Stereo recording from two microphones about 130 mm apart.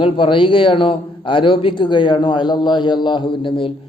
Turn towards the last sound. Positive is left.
turn(degrees=40)  # may be behind; listen again after turning